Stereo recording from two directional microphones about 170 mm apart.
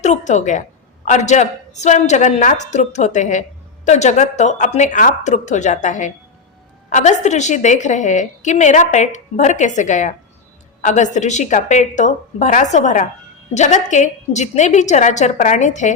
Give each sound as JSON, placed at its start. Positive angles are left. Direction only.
{"t": 0.0, "sound": "a woman's voice", "side_deg": 45}